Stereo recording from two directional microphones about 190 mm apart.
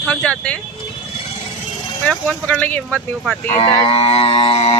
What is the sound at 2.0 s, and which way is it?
Speech, 5° left (ahead or behind).